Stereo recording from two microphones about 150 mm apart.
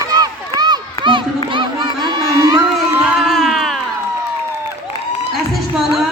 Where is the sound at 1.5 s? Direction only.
30° right (ahead or behind).